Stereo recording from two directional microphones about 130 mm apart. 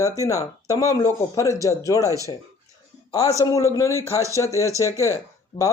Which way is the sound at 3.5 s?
25° left (ahead or behind).